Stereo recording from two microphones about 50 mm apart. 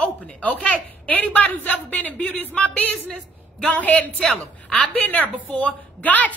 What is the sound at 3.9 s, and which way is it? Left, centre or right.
Speech, centre.